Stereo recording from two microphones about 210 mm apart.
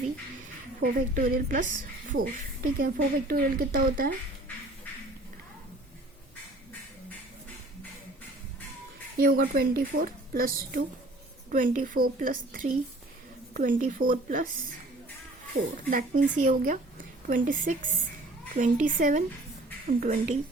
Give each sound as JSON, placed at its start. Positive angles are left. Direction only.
{"t": 0.8, "sound": "a woman's voice", "side_deg": -40}
{"t": 9.1, "sound": "a woman's voice", "side_deg": -45}
{"t": 15.9, "sound": "a woman's voice", "side_deg": -40}